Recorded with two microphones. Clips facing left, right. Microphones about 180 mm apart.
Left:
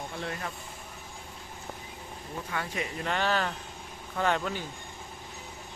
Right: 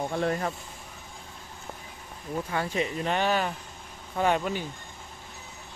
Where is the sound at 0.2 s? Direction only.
45° right (ahead or behind).